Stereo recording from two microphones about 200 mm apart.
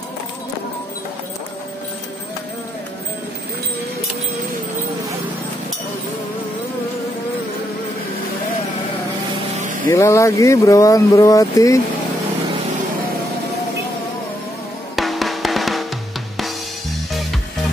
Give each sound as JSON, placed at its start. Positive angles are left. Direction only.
{"t": 9.8, "sound": "speech", "side_deg": 15}
{"t": 15.0, "sound": "drum", "side_deg": 0}